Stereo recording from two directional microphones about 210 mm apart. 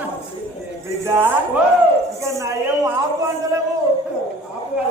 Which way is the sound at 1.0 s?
10° right (ahead or behind).